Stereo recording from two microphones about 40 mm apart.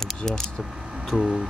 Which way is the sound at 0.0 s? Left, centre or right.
Centre.